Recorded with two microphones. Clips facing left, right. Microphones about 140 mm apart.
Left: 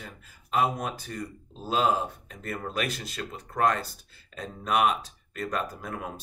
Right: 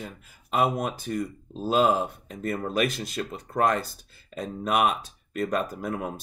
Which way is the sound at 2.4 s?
20° right (ahead or behind).